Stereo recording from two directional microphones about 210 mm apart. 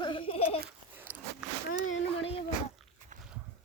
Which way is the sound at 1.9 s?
70° left (ahead or behind).